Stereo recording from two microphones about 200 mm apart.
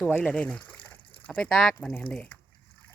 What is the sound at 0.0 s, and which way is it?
Speech, 5° left (ahead or behind).